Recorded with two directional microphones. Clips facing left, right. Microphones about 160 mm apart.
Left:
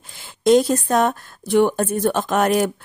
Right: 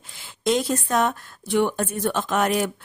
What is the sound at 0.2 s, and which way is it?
Speech, 40° left (ahead or behind).